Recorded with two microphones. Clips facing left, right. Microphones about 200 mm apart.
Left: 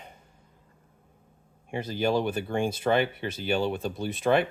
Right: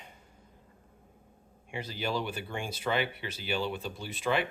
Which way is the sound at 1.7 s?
50° left (ahead or behind).